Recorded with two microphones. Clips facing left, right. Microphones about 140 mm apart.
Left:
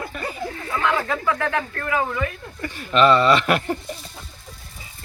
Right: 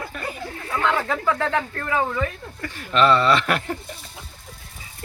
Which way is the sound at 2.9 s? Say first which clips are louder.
Left 2 dB; centre (ahead or behind).